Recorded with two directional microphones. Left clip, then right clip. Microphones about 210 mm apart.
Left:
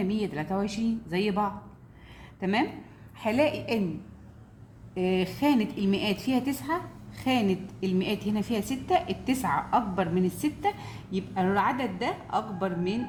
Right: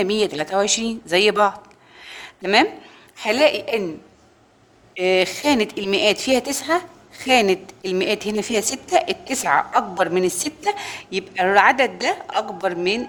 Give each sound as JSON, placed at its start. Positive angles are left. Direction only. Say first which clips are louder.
{"t": 0.0, "sound": "a woman's voice", "louder": "right 11 dB", "side_deg": -45}
{"t": 2.0, "sound": "a sound", "louder": "right 10 dB", "side_deg": -45}
{"t": 3.2, "sound": "a woman's voice", "louder": "right 9 dB", "side_deg": -35}
{"t": 4.9, "sound": "a woman's voice", "louder": "right 10 dB", "side_deg": -40}